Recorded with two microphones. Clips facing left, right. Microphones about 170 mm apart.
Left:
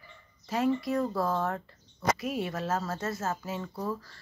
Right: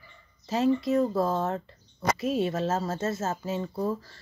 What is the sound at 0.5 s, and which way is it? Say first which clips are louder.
Speech: right 4 dB; 25° right (ahead or behind).